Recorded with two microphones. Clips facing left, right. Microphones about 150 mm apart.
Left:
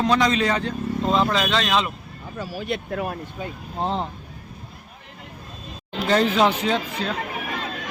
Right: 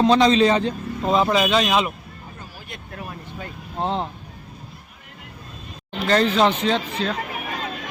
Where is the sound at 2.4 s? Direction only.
85° left.